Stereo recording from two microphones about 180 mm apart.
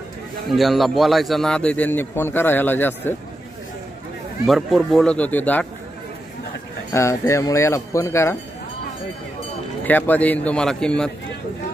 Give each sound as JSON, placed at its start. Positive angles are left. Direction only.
{"t": 0.5, "sound": "a man's voice", "side_deg": 0}
{"t": 4.5, "sound": "speech", "side_deg": 0}
{"t": 6.9, "sound": "a man's voice", "side_deg": 15}
{"t": 9.8, "sound": "a man's voice", "side_deg": 10}